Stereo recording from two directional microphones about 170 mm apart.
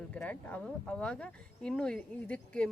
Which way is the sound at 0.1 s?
10° left (ahead or behind).